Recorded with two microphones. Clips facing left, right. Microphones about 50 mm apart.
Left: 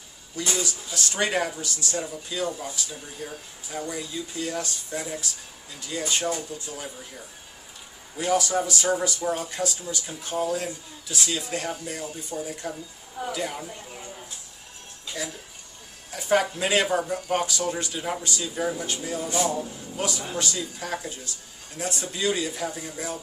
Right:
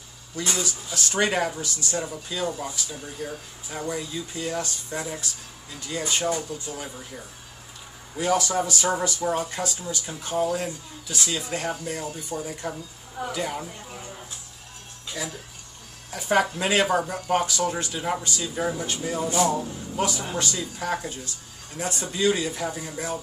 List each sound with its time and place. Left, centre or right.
0.4 s speech: centre
3.2 s speech: centre
3.7 s speech: centre
5.9 s speech: centre
8.2 s speech: centre
15.2 s speech: centre
19.3 s speech: right
19.6 s speech: centre